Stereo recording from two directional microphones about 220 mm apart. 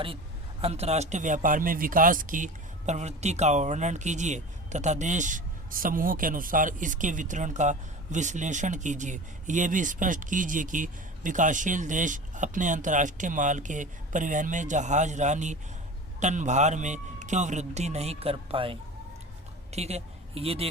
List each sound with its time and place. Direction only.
0.6 s a woman's voice: 30° right (ahead or behind)